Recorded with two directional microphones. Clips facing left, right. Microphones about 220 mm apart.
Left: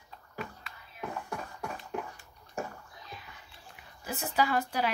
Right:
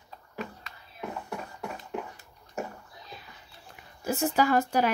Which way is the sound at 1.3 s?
20° right (ahead or behind).